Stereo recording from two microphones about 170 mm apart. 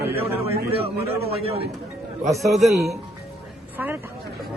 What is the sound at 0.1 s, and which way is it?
Speech, 10° right (ahead or behind).